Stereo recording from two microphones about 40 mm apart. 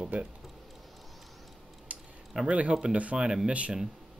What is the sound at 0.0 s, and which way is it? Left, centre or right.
Speech, right.